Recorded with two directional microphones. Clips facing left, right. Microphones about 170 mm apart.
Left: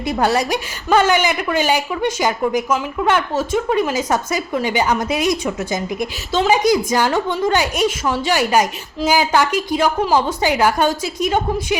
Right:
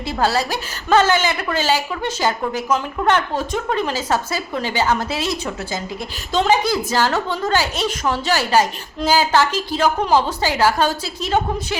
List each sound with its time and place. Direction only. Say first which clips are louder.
0.0 s a woman's voice: left 2 dB; 20° left (ahead or behind)
6.3 s a woman's voice: left 1 dB; 5° left (ahead or behind)
6.6 s a woman's voice: left 4 dB; 15° left (ahead or behind)